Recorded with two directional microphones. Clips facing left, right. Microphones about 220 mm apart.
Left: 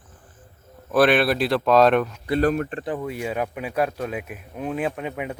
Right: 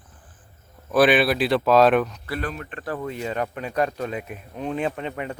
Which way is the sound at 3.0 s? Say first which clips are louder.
Right 2 dB; 10° left (ahead or behind).